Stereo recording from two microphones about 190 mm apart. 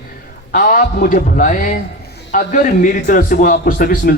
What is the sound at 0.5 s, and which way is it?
Speech, 45° left (ahead or behind).